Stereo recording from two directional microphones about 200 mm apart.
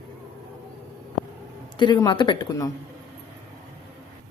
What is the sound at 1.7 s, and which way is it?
Speech, 25° left (ahead or behind).